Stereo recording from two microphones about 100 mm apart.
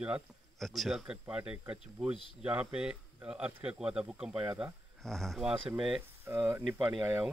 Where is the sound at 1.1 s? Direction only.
10° right (ahead or behind).